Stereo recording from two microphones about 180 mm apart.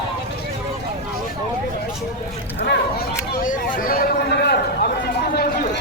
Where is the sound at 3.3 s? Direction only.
50° left (ahead or behind).